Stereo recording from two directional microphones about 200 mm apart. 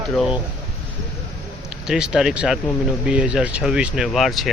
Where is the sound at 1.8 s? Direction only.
5° right (ahead or behind).